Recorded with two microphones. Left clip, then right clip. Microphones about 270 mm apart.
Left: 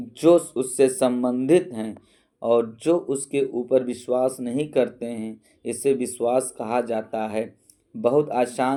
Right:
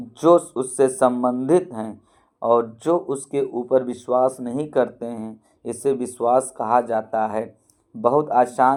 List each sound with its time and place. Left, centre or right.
0.1 s speech: centre